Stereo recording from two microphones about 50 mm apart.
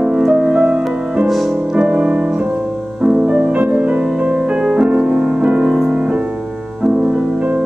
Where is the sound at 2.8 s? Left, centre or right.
Right.